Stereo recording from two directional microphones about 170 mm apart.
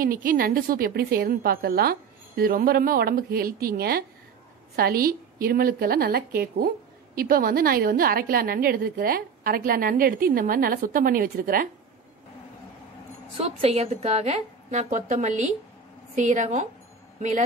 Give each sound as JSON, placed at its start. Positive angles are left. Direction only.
{"t": 0.0, "sound": "a woman's voice", "side_deg": -55}
{"t": 13.4, "sound": "a woman's voice", "side_deg": -40}